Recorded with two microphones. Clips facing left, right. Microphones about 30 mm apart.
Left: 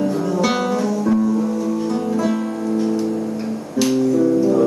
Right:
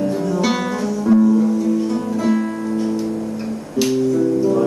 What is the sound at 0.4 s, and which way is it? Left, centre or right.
Music, centre.